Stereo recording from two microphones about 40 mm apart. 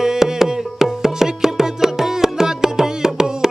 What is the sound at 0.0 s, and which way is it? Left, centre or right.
Music, centre.